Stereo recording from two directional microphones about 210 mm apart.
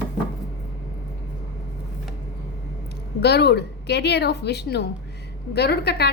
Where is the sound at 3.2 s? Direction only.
50° left (ahead or behind).